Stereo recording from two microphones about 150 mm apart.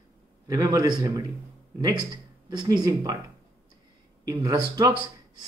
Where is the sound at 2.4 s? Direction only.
30° right (ahead or behind).